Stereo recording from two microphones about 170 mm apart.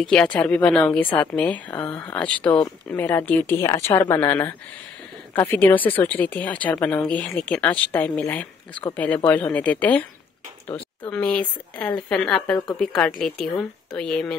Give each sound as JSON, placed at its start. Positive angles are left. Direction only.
{"t": 0.0, "sound": "a woman's voice", "side_deg": 5}